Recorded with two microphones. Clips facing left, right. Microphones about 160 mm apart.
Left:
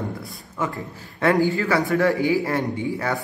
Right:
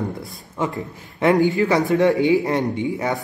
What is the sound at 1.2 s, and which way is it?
Speech, 20° right (ahead or behind).